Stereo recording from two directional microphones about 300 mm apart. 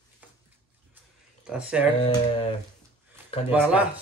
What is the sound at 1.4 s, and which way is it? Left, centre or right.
Speech, centre.